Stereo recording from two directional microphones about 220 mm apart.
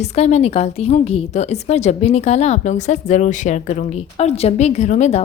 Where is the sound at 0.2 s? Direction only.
30° left (ahead or behind).